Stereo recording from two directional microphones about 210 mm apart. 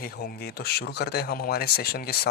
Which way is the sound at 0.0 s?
50° left (ahead or behind).